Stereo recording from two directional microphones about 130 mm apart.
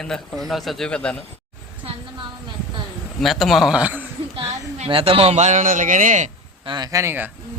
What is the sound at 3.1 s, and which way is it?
Speech, centre (ahead or behind).